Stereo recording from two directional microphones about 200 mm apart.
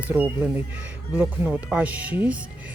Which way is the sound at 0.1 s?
10° right (ahead or behind).